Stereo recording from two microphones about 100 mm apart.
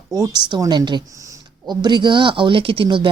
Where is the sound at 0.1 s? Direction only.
45° right (ahead or behind).